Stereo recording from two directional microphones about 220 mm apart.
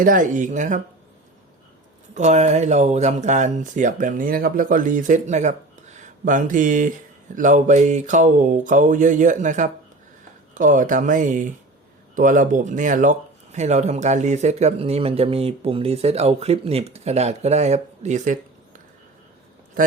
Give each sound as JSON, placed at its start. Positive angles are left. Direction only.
{"t": 0.0, "sound": "speech", "side_deg": -40}
{"t": 2.1, "sound": "speech", "side_deg": -30}